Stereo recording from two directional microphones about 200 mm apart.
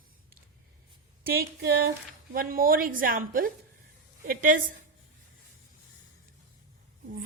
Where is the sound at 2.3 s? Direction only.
45° right (ahead or behind).